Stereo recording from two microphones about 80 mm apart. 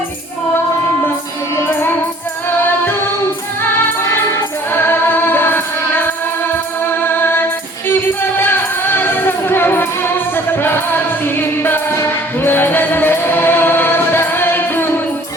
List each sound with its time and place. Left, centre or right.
1.5 s music: left
4.7 s music: left